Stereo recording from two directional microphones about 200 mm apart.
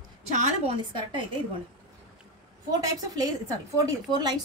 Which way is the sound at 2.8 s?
20° right (ahead or behind).